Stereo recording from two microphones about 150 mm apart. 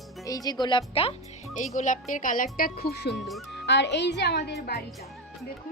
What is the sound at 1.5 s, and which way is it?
Speech, 55° left (ahead or behind).